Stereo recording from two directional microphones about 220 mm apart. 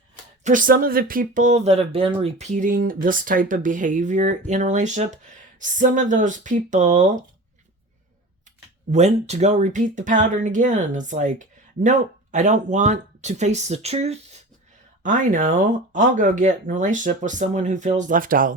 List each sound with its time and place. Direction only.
0.4 s speech: 40° right (ahead or behind)
8.9 s speech: 30° right (ahead or behind)